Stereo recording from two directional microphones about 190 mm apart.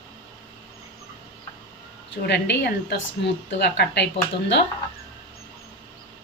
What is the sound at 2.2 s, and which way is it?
Speech, 65° left (ahead or behind).